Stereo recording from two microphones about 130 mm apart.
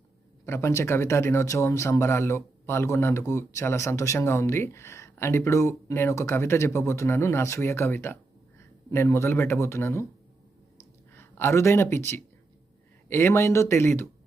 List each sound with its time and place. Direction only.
0.4 s speech: 20° left (ahead or behind)
11.1 s speech: 20° left (ahead or behind)